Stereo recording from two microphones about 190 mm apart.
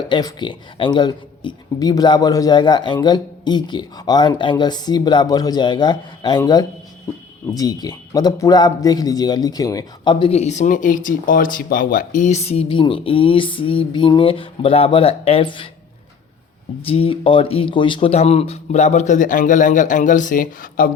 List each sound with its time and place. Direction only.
0.1 s a man's voice: 20° left (ahead or behind)
16.8 s speech: 30° left (ahead or behind); by 20.9 s 45° left (ahead or behind)